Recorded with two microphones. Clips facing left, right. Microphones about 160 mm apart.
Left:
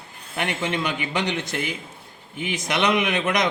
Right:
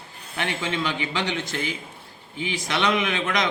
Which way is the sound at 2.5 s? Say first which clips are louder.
Left 2 dB; 15° left (ahead or behind).